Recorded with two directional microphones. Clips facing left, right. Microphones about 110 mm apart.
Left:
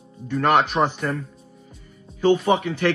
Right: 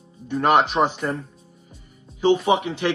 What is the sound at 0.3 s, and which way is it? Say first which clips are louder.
Speech: right 1 dB; 15° right (ahead or behind).